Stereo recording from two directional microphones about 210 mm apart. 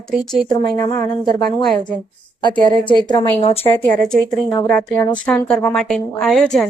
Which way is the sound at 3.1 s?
20° left (ahead or behind).